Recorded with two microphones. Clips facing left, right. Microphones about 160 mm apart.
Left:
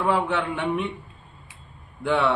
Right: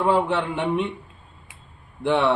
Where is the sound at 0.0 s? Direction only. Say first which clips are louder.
Right 3 dB; 30° right (ahead or behind).